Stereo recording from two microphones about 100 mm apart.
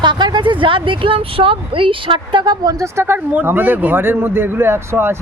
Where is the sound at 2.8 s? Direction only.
25° right (ahead or behind).